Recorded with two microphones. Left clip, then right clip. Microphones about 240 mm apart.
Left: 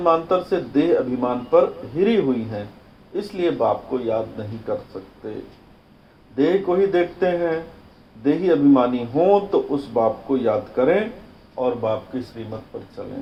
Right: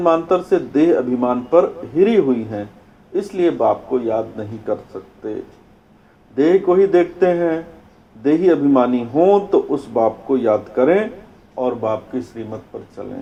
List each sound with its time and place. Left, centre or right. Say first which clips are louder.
0.0 s speech: right 3 dB; right
6.3 s speech: right 5 dB; right